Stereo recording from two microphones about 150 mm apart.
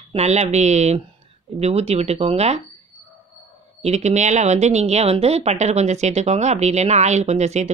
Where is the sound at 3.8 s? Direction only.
50° right (ahead or behind).